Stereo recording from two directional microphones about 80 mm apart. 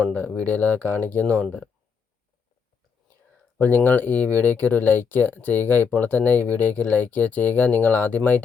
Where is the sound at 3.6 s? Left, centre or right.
Left.